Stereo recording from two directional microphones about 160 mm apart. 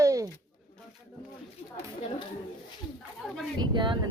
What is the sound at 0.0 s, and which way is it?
Pigeon, 20° right (ahead or behind).